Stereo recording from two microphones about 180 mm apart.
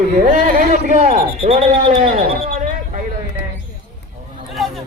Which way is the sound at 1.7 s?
35° right (ahead or behind).